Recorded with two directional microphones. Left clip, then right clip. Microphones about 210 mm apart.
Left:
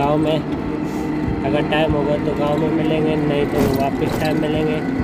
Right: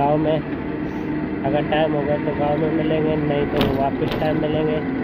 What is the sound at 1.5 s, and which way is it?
Speech, 15° left (ahead or behind).